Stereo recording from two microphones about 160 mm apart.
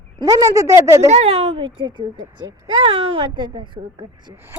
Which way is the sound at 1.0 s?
40° right (ahead or behind).